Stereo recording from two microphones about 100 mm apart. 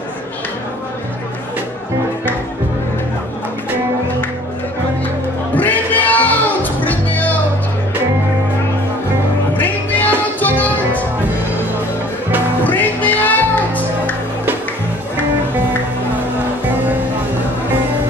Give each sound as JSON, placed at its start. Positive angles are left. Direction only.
{"t": 5.5, "sound": "music", "side_deg": 15}
{"t": 9.6, "sound": "music", "side_deg": 20}
{"t": 12.6, "sound": "music", "side_deg": 15}